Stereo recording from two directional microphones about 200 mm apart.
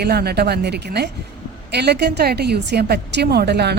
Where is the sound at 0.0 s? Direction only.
50° right (ahead or behind).